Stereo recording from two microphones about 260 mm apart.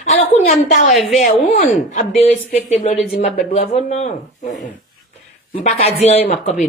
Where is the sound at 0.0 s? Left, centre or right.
Left.